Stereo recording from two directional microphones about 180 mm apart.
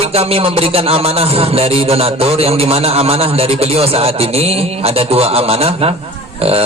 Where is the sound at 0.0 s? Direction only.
35° right (ahead or behind).